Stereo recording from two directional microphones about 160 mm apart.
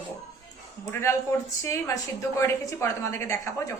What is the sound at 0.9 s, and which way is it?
A woman's voice, 15° left (ahead or behind).